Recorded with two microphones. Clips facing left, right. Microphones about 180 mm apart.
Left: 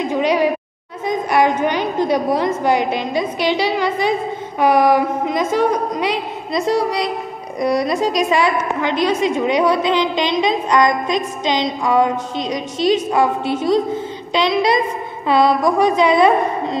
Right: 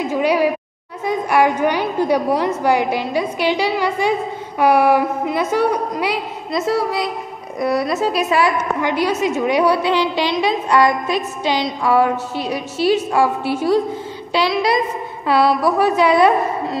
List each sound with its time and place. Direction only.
0.0 s a woman's voice: 10° right (ahead or behind)
1.0 s a sound: 10° right (ahead or behind)
2.0 s a woman's voice: 10° right (ahead or behind)
9.9 s a woman's voice: 15° left (ahead or behind)
10.3 s a woman's voice: 10° right (ahead or behind)